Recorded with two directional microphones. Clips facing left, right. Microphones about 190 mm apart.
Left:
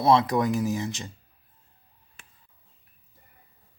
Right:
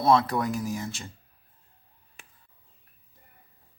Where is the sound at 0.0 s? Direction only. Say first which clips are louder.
Left 2 dB; 15° left (ahead or behind).